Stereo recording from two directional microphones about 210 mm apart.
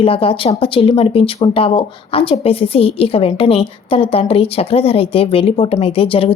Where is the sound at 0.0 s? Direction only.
25° left (ahead or behind).